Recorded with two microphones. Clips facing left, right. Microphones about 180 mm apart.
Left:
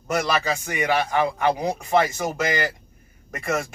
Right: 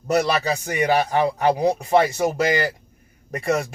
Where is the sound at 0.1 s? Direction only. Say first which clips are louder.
Right 3 dB; 35° right (ahead or behind).